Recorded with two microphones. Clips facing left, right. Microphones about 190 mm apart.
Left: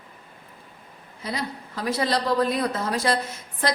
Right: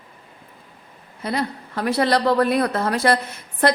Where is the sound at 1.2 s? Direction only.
60° right (ahead or behind).